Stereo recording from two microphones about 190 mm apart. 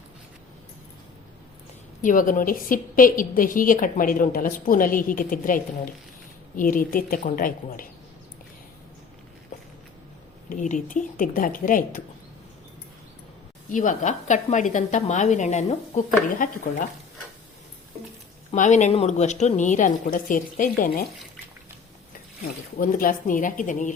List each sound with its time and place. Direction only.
2.0 s a woman's voice: 45° left (ahead or behind)
9.5 s a sound: 40° left (ahead or behind)
10.5 s a woman's voice: 40° left (ahead or behind)
13.7 s a woman's voice: 45° left (ahead or behind)
18.5 s a woman's voice: 40° left (ahead or behind)
22.8 s a woman's voice: 45° left (ahead or behind)